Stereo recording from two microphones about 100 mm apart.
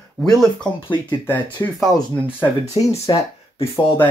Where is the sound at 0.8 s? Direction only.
20° left (ahead or behind).